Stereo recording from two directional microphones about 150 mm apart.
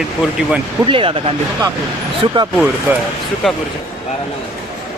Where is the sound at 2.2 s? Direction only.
30° right (ahead or behind).